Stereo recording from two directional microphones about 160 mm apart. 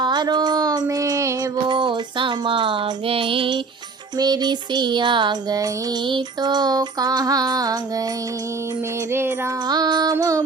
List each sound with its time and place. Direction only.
0.0 s child singing: 25° right (ahead or behind)
4.2 s music: 25° right (ahead or behind)
9.6 s music: 25° right (ahead or behind)